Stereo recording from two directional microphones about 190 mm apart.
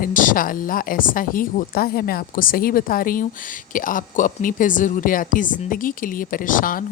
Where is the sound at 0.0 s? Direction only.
45° left (ahead or behind).